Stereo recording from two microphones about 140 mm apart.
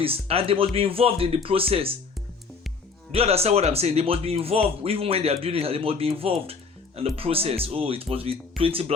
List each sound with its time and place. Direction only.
0.0 s speech: 45° right (ahead or behind)
3.1 s speech: 45° right (ahead or behind)